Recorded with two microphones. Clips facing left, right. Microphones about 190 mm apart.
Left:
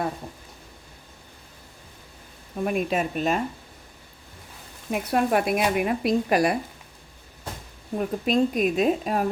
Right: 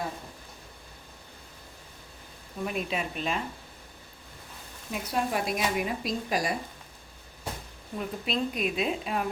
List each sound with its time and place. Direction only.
2.6 s a woman's voice: 50° left (ahead or behind)
4.9 s speech: 60° left (ahead or behind)
7.9 s a woman's voice: 45° left (ahead or behind)